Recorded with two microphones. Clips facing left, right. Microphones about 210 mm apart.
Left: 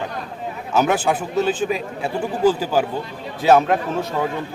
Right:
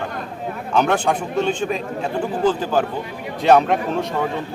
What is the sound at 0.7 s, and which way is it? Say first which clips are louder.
A man's voice: even; 5° left (ahead or behind).